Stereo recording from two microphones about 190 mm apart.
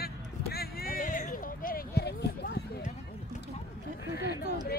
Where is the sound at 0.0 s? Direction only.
55° left (ahead or behind).